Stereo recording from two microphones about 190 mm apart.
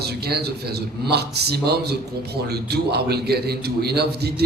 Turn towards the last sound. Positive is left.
turn(degrees=-60)  # may be behind; listen again after turning